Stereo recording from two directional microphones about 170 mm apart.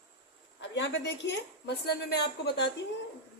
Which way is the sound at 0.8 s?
90° left.